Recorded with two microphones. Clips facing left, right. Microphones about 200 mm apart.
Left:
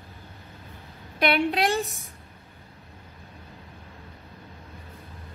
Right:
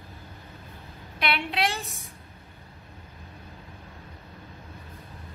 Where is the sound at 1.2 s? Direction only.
45° left (ahead or behind).